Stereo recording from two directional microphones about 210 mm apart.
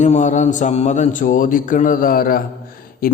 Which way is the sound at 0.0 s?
35° left (ahead or behind).